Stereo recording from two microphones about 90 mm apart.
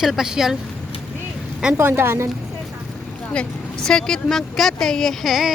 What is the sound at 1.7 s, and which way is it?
Speech, 25° right (ahead or behind).